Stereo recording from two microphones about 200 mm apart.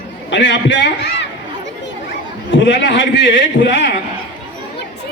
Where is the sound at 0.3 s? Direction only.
65° left (ahead or behind).